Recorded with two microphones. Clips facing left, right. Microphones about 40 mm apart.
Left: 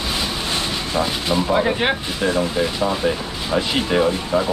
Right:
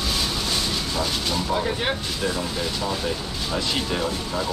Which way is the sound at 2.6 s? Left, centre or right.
Left.